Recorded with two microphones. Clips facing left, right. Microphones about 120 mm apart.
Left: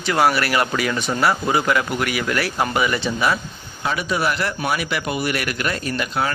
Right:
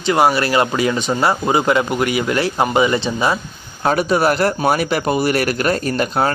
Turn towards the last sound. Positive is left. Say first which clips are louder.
# right 5 dB
turn(degrees=-40)  # may be behind; listen again after turning